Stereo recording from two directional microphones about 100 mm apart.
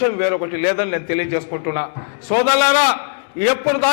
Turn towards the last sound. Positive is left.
turn(degrees=20)  # may be behind; listen again after turning